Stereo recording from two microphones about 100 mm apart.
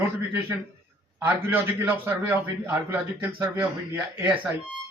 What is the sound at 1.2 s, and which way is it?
Speech, 20° right (ahead or behind).